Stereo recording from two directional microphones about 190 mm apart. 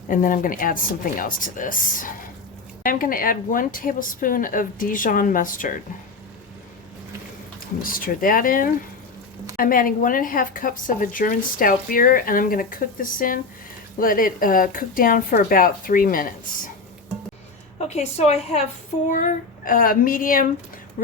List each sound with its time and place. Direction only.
0.1 s speech: 45° left (ahead or behind)
7.8 s speech: 50° left (ahead or behind)
17.7 s a woman's voice: 35° left (ahead or behind)
19.0 s speech: 45° left (ahead or behind)